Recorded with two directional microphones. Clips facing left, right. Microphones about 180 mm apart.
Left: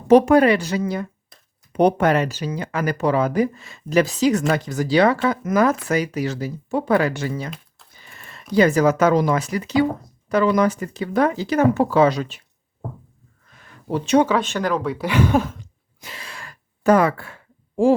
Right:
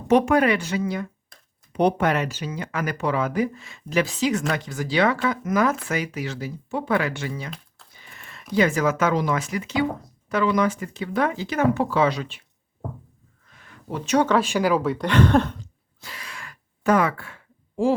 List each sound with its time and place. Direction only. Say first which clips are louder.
0.1 s speech: left 5 dB; 35° left (ahead or behind)
1.3 s a sound: left 1 dB; centre (ahead or behind)
1.7 s speech: left 4 dB; 45° left (ahead or behind)
8.5 s speech: left 5 dB; 35° left (ahead or behind)
13.6 s a sound: left 6 dB; 35° left (ahead or behind)
14.4 s speech: right 1 dB; 10° right (ahead or behind)
16.0 s gasp: left 2 dB; 25° left (ahead or behind); by 17.9 s 40° left (ahead or behind)